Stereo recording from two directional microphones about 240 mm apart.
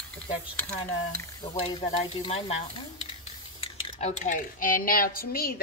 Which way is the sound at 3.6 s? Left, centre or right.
Left.